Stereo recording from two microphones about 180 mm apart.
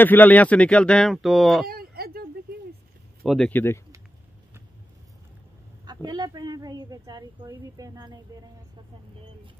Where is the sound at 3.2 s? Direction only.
5° left (ahead or behind).